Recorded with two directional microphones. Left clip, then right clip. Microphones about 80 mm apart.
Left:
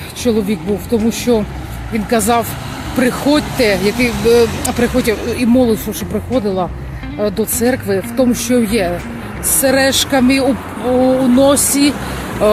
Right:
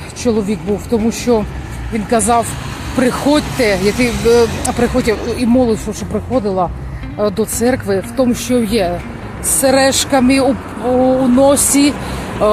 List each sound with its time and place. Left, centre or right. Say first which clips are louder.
0.2 s speech: even; centre
0.7 s speech: right 2 dB; centre
1.3 s speech: right 1 dB; left
3.0 s speech: right 1 dB; centre; by 6.7 s left
7.2 s speech: right 1 dB; centre
8.1 s speech: left 2 dB; left
9.6 s speech: right 1 dB; centre